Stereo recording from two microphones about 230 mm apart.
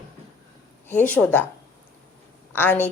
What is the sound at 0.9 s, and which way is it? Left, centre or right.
Speech, centre.